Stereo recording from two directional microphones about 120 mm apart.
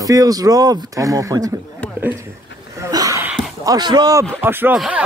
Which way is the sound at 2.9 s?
30° right (ahead or behind).